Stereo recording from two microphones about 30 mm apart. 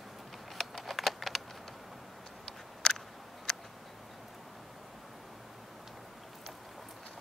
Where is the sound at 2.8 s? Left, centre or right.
Centre.